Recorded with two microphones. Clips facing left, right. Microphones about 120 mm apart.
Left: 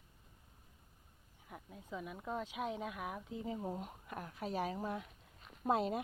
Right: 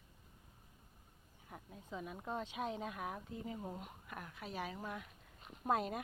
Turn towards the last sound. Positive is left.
turn(degrees=25)  # may be behind; listen again after turning